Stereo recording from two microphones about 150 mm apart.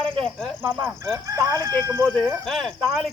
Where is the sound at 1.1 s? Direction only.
25° right (ahead or behind).